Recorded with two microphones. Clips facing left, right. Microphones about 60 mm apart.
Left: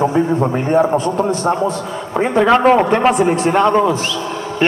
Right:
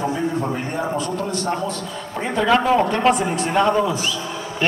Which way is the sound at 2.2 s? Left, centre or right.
Left.